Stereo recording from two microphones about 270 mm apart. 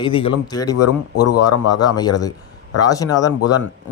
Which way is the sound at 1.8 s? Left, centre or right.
Centre.